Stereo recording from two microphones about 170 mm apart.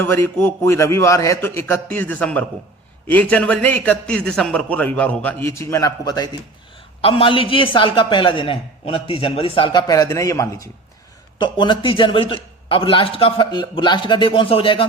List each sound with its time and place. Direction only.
0.0 s a man's voice: 15° left (ahead or behind); by 14.8 s 30° left (ahead or behind)